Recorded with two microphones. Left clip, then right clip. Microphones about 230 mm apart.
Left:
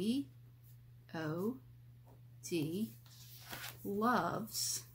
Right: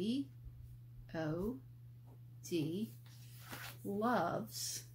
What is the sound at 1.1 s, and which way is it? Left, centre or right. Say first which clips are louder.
Speech: right 1 dB; centre.